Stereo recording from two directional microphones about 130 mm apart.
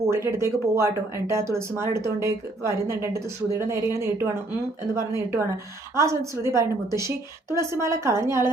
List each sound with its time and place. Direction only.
0.0 s a woman's voice: 20° right (ahead or behind)